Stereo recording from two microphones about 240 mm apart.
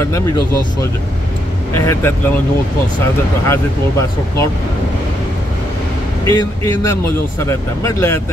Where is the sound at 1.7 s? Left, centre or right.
Centre.